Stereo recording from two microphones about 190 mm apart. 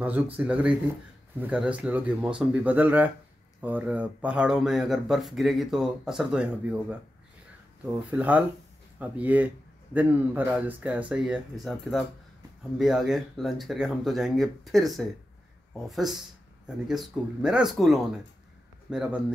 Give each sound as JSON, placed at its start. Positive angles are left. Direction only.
{"t": 0.0, "sound": "speech", "side_deg": -10}